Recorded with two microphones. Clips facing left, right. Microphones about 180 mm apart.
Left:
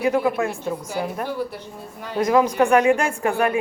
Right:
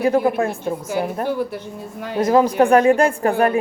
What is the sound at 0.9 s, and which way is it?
Speech, 55° right (ahead or behind).